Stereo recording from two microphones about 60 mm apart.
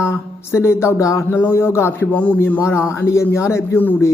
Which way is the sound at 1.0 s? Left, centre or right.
Left.